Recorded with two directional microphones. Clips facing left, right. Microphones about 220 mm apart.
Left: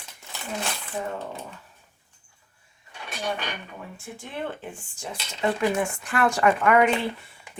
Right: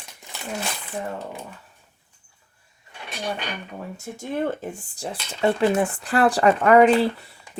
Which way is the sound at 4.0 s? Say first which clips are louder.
Right 8 dB; 40° right (ahead or behind).